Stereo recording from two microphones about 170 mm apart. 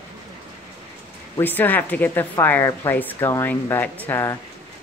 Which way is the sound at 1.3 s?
10° left (ahead or behind).